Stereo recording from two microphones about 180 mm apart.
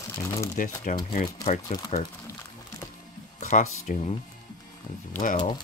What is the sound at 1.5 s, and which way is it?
Speech, 45° left (ahead or behind).